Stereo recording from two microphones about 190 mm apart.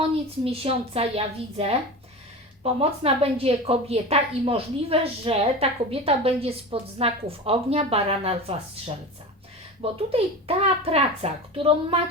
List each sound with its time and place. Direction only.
0.0 s a woman's voice: 30° right (ahead or behind)
9.8 s a woman's voice: 30° right (ahead or behind)